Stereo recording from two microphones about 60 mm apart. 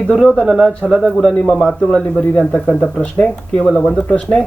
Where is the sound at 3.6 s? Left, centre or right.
Centre.